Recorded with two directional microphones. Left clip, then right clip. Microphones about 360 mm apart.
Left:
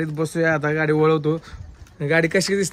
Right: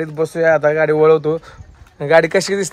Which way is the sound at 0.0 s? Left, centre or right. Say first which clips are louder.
Right 6 dB; centre.